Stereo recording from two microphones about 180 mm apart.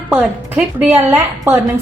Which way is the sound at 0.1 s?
10° right (ahead or behind).